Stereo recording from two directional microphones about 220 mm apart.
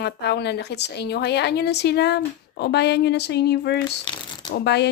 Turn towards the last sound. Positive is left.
turn(degrees=50)  # may be behind; listen again after turning